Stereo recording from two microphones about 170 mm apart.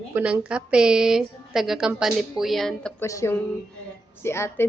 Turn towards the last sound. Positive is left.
turn(degrees=15)  # may be behind; listen again after turning